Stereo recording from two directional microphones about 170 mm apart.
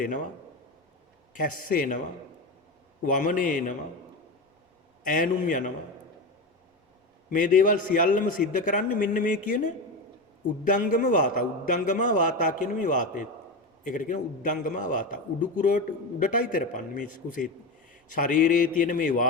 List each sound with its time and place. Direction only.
1.3 s a man's voice: 50° left (ahead or behind)
3.0 s a man's voice: 50° left (ahead or behind)
5.0 s a man's voice: 50° left (ahead or behind)
7.3 s a man's voice: 50° left (ahead or behind)